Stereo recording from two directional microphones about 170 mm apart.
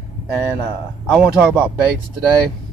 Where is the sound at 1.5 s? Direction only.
5° right (ahead or behind).